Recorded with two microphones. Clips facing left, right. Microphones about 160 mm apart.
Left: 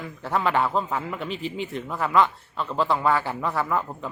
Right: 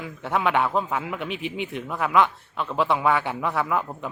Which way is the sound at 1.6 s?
Centre (ahead or behind).